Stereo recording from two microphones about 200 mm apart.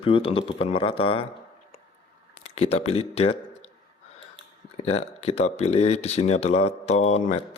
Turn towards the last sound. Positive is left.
turn(degrees=35)  # may be behind; listen again after turning